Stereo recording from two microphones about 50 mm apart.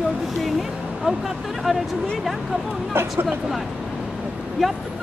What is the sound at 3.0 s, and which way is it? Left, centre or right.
Speech, right.